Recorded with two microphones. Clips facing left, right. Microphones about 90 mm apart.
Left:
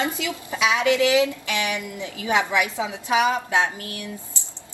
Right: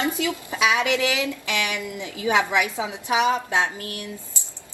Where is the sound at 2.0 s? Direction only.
20° right (ahead or behind).